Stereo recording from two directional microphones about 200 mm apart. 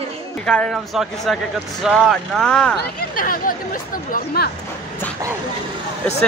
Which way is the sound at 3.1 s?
45° left (ahead or behind).